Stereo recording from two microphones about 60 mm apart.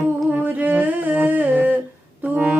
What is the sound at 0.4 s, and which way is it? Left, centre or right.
Music, right.